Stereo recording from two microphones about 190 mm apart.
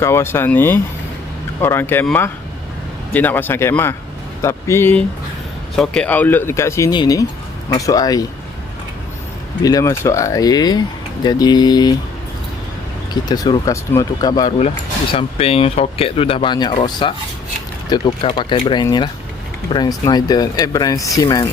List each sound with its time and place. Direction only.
0.0 s speech: 15° left (ahead or behind)
9.6 s speech: 20° left (ahead or behind)
13.2 s speech: 20° left (ahead or behind)
15.1 s speech: 30° left (ahead or behind)